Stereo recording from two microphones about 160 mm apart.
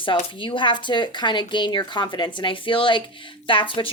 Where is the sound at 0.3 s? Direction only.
30° left (ahead or behind).